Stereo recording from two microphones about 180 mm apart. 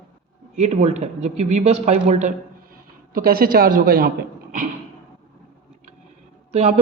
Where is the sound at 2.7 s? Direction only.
55° right (ahead or behind).